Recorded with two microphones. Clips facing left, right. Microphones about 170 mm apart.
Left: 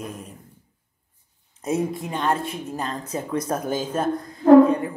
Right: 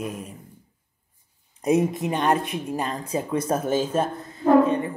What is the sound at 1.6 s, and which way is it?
Speech, 15° right (ahead or behind).